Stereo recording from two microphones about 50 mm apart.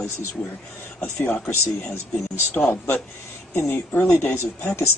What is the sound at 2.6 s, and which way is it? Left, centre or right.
Speech, left.